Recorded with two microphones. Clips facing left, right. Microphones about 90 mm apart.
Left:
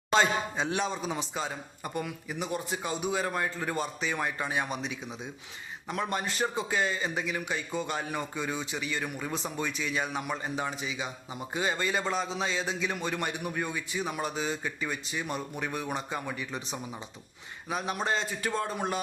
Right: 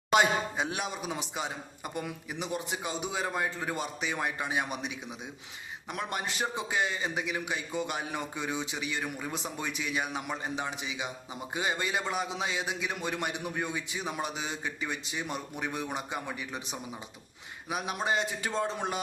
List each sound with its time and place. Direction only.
0.1 s a man's voice: 15° right (ahead or behind)
5.9 s a man's voice: 15° right (ahead or behind)